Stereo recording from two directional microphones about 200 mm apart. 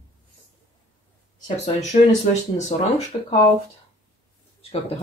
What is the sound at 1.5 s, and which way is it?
Speech, 35° left (ahead or behind).